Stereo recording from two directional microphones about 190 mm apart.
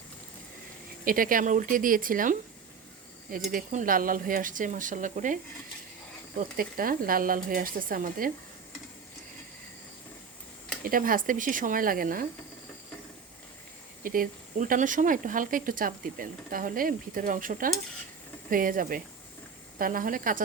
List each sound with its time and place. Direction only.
1.0 s speech: 50° right (ahead or behind)
3.5 s speech: 45° right (ahead or behind)
6.6 s speech: 50° right (ahead or behind)
10.8 s speech: 50° right (ahead or behind)
14.0 s speech: 45° right (ahead or behind)